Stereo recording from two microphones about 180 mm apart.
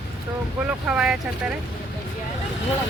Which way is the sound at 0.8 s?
5° right (ahead or behind).